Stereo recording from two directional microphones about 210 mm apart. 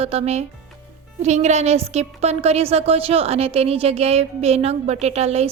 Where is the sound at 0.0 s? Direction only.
30° right (ahead or behind).